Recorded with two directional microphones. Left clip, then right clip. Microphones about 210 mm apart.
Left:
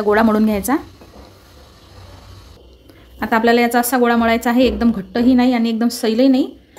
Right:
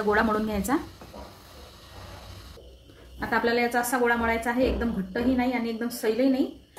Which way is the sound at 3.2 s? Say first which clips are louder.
Left 10 dB; 55° left (ahead or behind).